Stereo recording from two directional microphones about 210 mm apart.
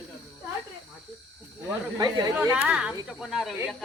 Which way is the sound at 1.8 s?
20° right (ahead or behind).